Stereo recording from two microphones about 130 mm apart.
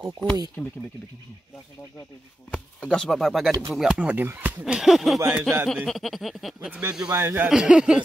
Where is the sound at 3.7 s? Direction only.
Centre (ahead or behind).